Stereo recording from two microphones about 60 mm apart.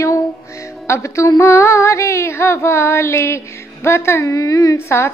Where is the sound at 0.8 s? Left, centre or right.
Left.